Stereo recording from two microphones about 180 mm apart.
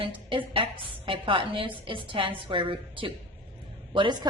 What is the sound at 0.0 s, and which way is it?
A woman's voice, 30° right (ahead or behind).